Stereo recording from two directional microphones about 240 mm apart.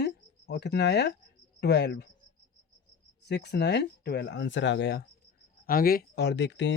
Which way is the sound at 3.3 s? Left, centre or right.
Left.